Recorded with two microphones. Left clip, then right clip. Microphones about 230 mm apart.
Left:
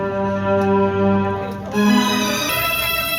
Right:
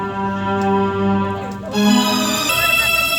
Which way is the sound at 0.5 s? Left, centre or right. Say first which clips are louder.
Left 1 dB; left.